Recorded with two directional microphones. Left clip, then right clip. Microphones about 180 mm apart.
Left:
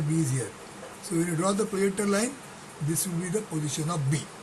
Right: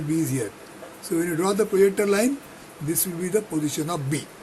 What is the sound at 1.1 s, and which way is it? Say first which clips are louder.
Speech: right 4 dB; 40° right (ahead or behind).